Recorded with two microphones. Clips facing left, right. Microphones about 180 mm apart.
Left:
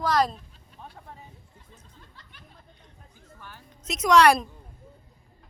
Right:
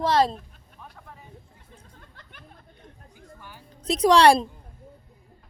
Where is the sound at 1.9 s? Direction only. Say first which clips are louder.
Right 2 dB; 55° right (ahead or behind).